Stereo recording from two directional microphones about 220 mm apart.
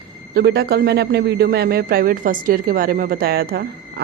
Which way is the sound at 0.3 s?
45° right (ahead or behind).